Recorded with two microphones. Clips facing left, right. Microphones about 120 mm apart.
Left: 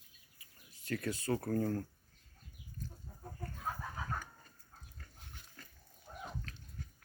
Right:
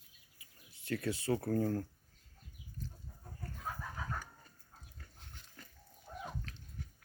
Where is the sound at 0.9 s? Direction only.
25° right (ahead or behind).